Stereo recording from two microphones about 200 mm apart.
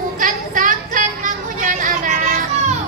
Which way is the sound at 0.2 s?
40° right (ahead or behind).